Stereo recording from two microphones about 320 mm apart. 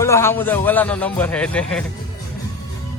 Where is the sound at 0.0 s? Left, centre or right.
Centre.